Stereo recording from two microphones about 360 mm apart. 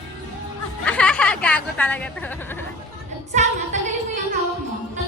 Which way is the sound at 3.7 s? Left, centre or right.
Centre.